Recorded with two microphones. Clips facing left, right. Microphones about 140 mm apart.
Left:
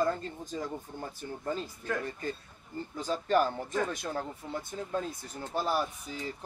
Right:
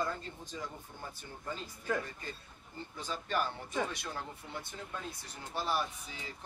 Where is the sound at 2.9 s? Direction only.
45° left (ahead or behind).